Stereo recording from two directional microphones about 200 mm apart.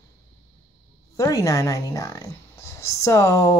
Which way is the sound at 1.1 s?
15° left (ahead or behind).